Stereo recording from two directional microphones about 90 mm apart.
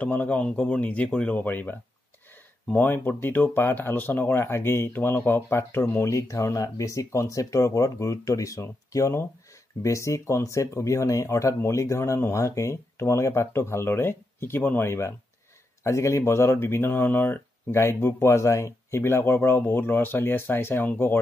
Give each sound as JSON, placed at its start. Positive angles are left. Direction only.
{"t": 0.0, "sound": "speech", "side_deg": 15}